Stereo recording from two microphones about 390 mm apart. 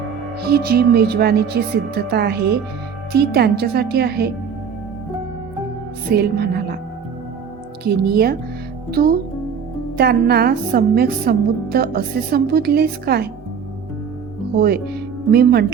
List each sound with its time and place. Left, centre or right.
0.4 s a woman's voice: right
6.1 s music: right
7.9 s a woman's voice: right
15.3 s a woman's voice: right